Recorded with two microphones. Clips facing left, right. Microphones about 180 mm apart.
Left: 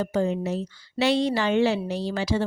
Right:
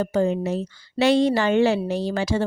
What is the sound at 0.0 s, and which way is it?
Speech, 50° right (ahead or behind).